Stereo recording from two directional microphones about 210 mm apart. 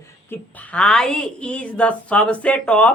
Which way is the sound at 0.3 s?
5° left (ahead or behind).